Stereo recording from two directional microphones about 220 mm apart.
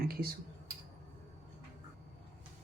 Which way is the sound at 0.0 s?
40° right (ahead or behind).